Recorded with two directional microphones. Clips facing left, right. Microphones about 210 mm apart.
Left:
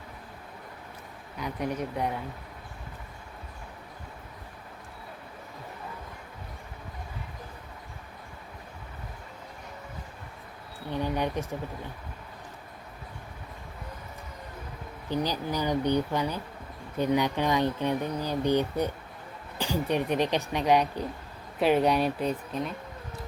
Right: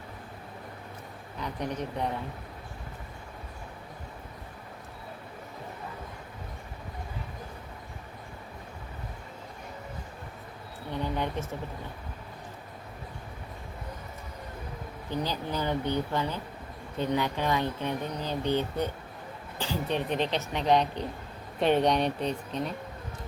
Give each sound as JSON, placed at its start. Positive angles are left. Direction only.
{"t": 1.4, "sound": "speech", "side_deg": 10}
{"t": 11.1, "sound": "a sound", "side_deg": 15}
{"t": 15.2, "sound": "speech", "side_deg": 15}